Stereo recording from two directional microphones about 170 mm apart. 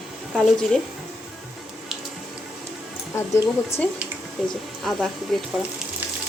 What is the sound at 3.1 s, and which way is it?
Speech, 15° left (ahead or behind).